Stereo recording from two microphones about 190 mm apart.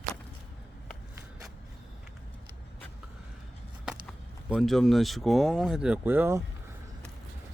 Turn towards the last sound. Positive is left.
turn(degrees=-10)  # may be behind; listen again after turning